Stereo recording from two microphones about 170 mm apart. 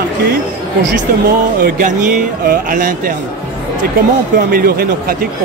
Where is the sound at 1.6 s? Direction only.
55° right (ahead or behind).